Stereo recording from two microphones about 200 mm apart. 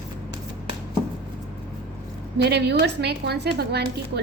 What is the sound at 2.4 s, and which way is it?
A woman's voice, 55° right (ahead or behind).